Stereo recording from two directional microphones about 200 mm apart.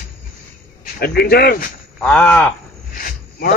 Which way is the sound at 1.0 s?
50° left (ahead or behind).